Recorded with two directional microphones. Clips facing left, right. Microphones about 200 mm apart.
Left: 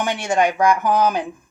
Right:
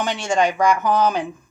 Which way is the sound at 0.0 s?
15° left (ahead or behind).